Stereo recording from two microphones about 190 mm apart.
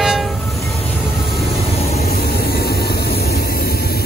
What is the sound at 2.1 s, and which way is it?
Vehicle, 50° left (ahead or behind).